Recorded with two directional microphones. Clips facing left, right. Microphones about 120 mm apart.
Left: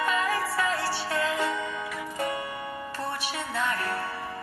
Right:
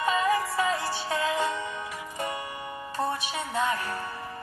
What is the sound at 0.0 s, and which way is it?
Music, 20° right (ahead or behind).